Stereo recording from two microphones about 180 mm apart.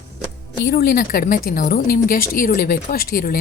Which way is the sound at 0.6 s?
60° left (ahead or behind).